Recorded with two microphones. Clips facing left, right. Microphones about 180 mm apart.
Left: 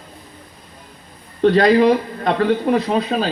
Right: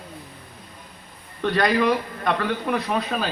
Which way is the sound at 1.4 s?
25° left (ahead or behind).